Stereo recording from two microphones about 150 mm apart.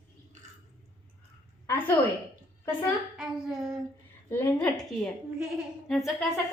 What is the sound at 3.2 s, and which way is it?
Humming, 5° right (ahead or behind).